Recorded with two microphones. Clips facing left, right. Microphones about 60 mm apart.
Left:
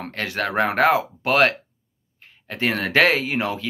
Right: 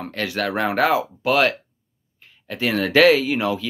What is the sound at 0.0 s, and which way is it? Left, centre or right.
Speech, left.